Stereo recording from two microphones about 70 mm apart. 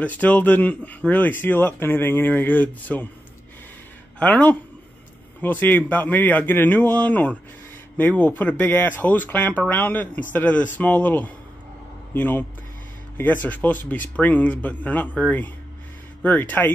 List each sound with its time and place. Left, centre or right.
0.0 s speech: left
4.2 s a man's voice: left